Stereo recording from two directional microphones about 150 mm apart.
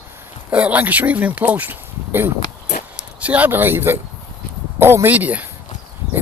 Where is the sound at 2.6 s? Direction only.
50° left (ahead or behind).